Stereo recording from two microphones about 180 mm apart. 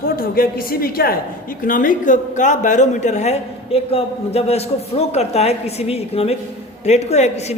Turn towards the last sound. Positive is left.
turn(degrees=40)  # may be behind; listen again after turning